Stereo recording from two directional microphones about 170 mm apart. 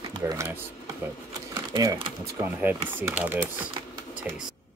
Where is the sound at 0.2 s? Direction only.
15° right (ahead or behind).